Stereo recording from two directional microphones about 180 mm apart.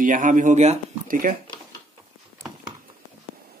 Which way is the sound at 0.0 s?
45° right (ahead or behind).